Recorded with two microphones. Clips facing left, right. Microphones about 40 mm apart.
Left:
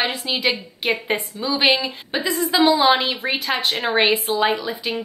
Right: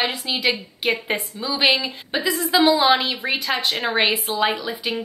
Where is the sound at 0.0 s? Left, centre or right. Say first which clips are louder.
Left 1 dB; centre.